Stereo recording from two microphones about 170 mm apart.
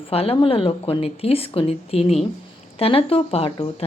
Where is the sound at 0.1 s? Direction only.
35° left (ahead or behind).